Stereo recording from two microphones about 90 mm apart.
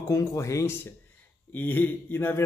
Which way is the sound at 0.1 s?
35° left (ahead or behind).